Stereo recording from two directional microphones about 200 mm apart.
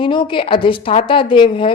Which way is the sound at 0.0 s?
25° left (ahead or behind).